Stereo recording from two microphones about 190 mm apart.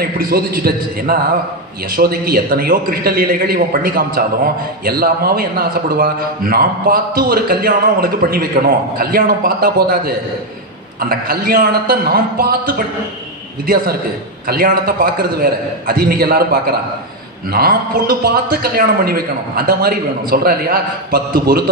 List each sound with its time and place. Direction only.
0.0 s a man's voice: 55° right (ahead or behind)
14.5 s a man's voice: 50° right (ahead or behind)